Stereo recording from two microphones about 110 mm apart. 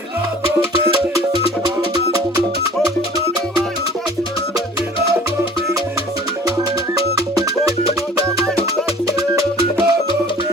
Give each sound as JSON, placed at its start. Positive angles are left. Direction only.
{"t": 9.3, "sound": "music", "side_deg": -35}